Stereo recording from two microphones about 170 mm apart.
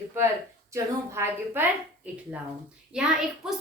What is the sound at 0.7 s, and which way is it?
A woman's voice, 15° right (ahead or behind).